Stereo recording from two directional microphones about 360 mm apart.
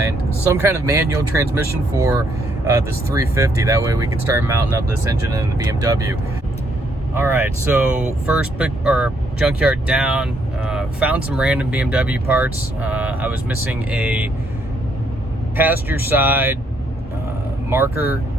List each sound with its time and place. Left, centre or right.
0.5 s speech: centre
15.5 s speech: centre
17.7 s speech: centre